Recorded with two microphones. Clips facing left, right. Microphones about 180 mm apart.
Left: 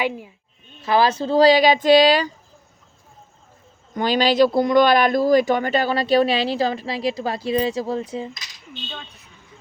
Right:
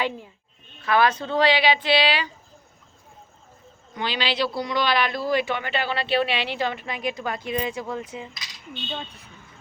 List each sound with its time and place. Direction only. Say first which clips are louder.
0.9 s a man's voice: left 3 dB; 30° left (ahead or behind)
3.9 s a man's voice: left 9 dB; 45° left (ahead or behind)